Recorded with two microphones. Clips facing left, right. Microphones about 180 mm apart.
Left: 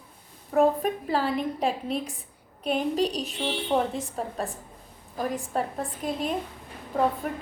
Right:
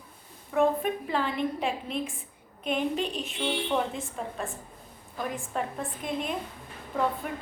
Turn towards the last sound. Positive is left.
turn(degrees=40)  # may be behind; listen again after turning